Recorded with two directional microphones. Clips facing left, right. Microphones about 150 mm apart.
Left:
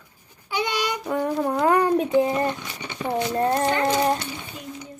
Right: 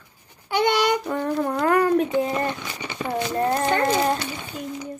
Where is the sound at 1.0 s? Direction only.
10° left (ahead or behind).